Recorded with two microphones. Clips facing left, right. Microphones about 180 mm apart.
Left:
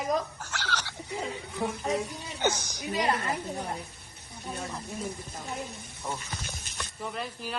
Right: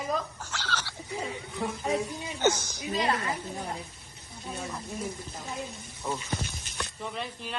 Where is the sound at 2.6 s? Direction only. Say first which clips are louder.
Even; 15° left (ahead or behind).